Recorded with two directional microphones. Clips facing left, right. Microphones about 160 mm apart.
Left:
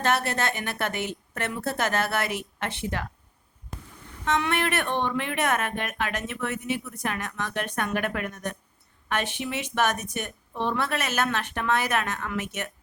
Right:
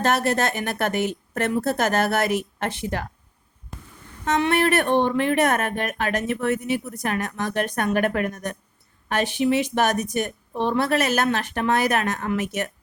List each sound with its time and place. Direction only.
0.0 s speech: 40° right (ahead or behind)
4.3 s speech: 35° right (ahead or behind)